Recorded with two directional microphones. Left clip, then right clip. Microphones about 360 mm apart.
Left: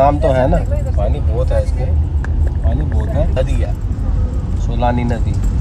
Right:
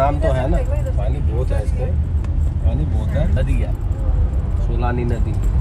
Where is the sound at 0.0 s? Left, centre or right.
Left.